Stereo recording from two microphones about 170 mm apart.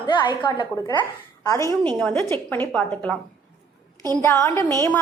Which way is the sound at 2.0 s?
5° left (ahead or behind).